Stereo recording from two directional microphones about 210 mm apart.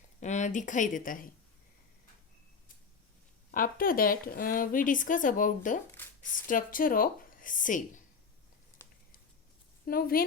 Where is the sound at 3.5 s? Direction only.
40° left (ahead or behind).